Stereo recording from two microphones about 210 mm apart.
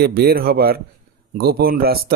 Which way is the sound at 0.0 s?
45° right (ahead or behind).